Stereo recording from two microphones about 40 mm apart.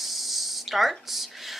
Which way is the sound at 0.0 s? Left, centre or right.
Centre.